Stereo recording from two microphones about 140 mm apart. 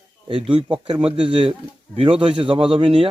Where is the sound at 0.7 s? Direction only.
40° right (ahead or behind).